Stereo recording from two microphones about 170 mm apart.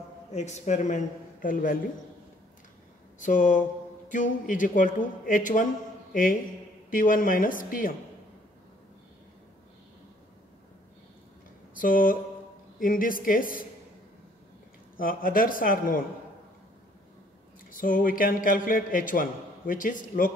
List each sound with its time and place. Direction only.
0.3 s a man's voice: 40° left (ahead or behind)
3.2 s a man's voice: 50° left (ahead or behind)
6.9 s a man's voice: 55° left (ahead or behind)
11.7 s speech: 55° left (ahead or behind)
15.0 s speech: 55° left (ahead or behind)
17.6 s a man's voice: 55° left (ahead or behind)